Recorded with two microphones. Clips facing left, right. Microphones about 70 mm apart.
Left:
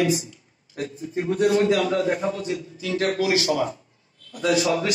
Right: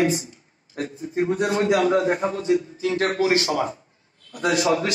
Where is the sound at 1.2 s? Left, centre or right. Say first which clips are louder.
Left 1 dB; right.